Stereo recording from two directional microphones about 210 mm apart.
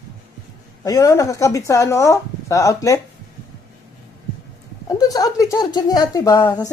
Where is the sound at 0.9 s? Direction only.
15° left (ahead or behind).